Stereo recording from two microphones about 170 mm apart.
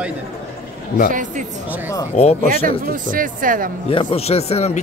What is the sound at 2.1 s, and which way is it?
Speech, 40° left (ahead or behind).